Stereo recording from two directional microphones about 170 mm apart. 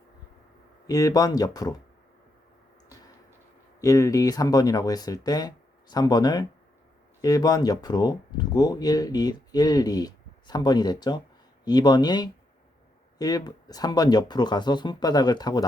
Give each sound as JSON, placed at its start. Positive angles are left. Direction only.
{"t": 0.9, "sound": "speech", "side_deg": 20}
{"t": 3.8, "sound": "speech", "side_deg": 20}